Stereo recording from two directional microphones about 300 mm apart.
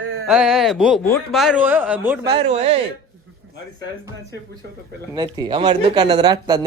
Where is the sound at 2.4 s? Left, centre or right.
Right.